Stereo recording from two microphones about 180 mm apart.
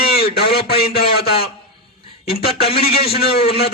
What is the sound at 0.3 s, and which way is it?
Speech, 60° left (ahead or behind).